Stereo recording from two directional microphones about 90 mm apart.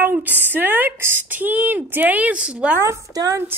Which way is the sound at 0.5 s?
20° right (ahead or behind).